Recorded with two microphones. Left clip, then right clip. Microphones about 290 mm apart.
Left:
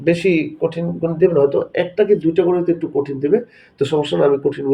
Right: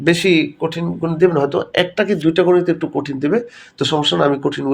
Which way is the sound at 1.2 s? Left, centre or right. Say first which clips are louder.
Left 1 dB; right.